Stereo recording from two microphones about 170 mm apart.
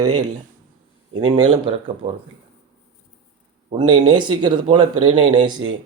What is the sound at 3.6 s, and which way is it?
Speech, 30° right (ahead or behind).